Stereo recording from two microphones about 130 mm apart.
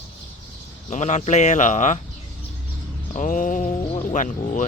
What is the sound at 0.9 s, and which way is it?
Speech, 65° left (ahead or behind).